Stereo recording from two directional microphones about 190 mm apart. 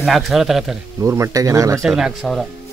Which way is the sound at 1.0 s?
15° right (ahead or behind).